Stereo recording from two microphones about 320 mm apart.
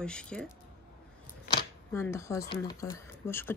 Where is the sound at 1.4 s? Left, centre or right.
Left.